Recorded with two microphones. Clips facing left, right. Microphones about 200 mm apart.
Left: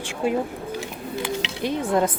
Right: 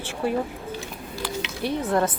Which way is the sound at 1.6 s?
15° left (ahead or behind).